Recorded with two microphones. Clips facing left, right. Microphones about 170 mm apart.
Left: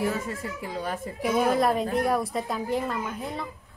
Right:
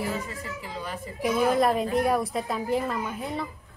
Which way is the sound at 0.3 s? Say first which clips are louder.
Left 3 dB; 50° left (ahead or behind).